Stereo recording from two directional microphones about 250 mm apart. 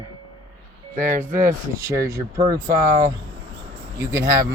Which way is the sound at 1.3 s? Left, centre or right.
Right.